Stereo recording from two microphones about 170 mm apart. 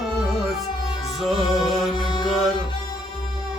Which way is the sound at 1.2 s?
Centre (ahead or behind).